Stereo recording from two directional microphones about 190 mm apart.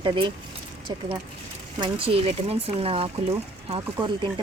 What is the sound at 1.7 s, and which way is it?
Speech, 25° right (ahead or behind).